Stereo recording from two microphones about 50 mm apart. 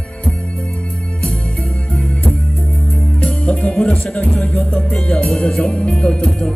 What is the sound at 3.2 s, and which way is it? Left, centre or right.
Music, left.